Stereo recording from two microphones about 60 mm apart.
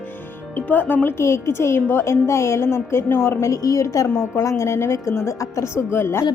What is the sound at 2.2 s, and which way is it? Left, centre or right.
Music, left.